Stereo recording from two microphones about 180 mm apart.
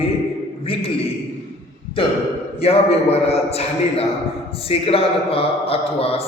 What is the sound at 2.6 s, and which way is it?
Speech, 35° left (ahead or behind).